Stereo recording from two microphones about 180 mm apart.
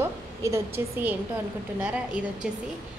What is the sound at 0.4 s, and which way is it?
A woman's voice, 15° right (ahead or behind).